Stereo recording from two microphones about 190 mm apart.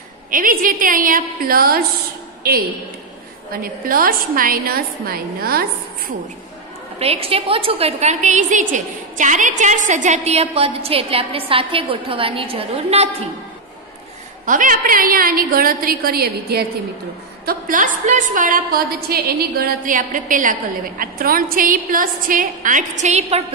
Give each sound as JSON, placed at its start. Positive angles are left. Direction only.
{"t": 0.3, "sound": "a woman's voice", "side_deg": -45}
{"t": 3.6, "sound": "a woman's voice", "side_deg": -50}
{"t": 7.0, "sound": "a woman's voice", "side_deg": -30}
{"t": 14.4, "sound": "a woman's voice", "side_deg": -45}